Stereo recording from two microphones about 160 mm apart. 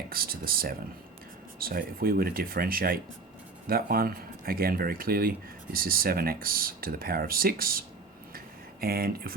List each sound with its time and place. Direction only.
0.1 s speech: 65° right (ahead or behind)